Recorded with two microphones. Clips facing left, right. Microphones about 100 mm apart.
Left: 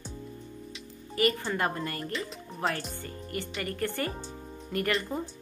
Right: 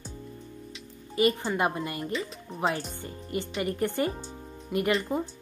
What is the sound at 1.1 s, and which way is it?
A woman's voice, 20° right (ahead or behind).